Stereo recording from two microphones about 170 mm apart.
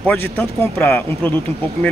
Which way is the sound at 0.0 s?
10° left (ahead or behind).